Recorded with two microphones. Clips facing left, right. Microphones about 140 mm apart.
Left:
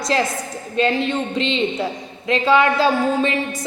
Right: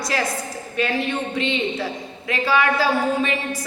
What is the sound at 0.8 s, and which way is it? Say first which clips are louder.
A man's voice: left 4 dB; 25° left (ahead or behind).